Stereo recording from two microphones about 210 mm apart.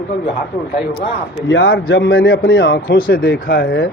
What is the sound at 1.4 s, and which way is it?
A man's voice, 60° left (ahead or behind).